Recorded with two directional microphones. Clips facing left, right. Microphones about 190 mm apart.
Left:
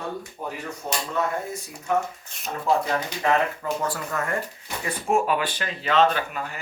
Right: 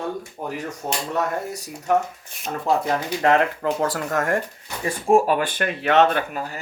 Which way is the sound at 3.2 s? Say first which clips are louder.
Right 5 dB; 65° right (ahead or behind).